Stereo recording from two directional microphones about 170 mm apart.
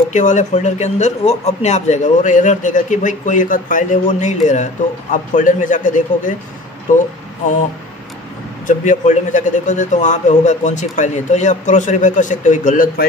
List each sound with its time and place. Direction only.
0.1 s speech: 45° left (ahead or behind)
8.6 s speech: 45° left (ahead or behind)